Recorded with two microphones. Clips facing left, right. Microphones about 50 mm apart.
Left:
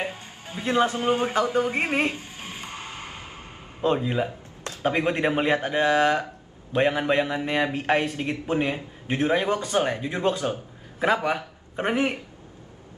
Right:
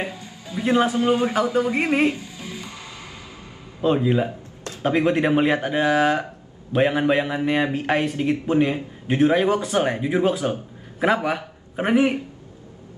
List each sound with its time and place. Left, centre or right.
0.0 s music: left
0.9 s a man's voice: left
2.0 s music: left
3.8 s a man's voice: centre